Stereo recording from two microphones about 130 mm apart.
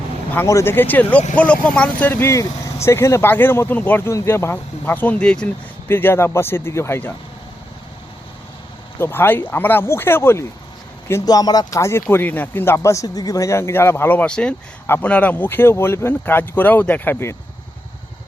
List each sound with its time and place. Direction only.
0.3 s speech: 20° left (ahead or behind)
9.0 s speech: 15° left (ahead or behind)
11.1 s speech: 30° left (ahead or behind)